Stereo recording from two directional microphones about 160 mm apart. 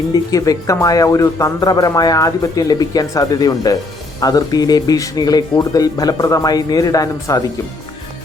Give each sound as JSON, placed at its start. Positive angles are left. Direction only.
{"t": 0.1, "sound": "speech", "side_deg": 20}